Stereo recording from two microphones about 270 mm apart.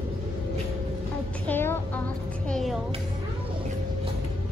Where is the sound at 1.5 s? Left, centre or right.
Centre.